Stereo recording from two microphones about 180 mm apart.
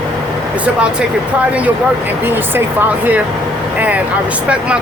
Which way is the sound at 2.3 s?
10° right (ahead or behind).